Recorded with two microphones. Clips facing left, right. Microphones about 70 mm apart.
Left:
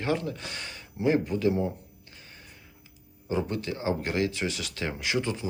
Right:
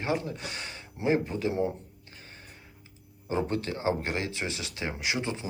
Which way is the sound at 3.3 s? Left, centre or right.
Right.